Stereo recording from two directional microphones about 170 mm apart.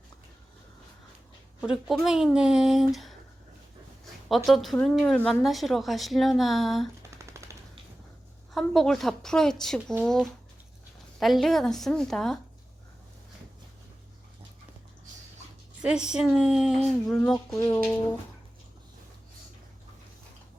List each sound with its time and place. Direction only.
1.6 s a woman's voice: centre (ahead or behind)
4.4 s a woman's voice: centre (ahead or behind)
7.2 s machine gun: 15° right (ahead or behind)
8.5 s a woman's voice: centre (ahead or behind)
15.8 s a woman's voice: 5° right (ahead or behind)
17.5 s speech: 20° left (ahead or behind)